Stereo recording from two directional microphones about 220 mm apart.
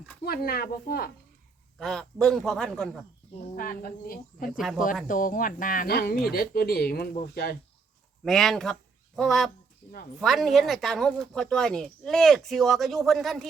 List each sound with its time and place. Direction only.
0.3 s speech: 45° left (ahead or behind)
1.8 s speech: centre (ahead or behind)
3.3 s speech: 40° left (ahead or behind)
8.2 s speech: centre (ahead or behind)